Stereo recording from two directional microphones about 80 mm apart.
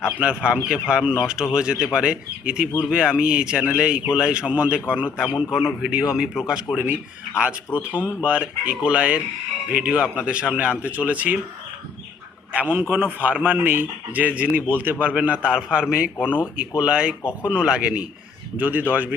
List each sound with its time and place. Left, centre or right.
0.2 s speech: centre
12.5 s a man's voice: centre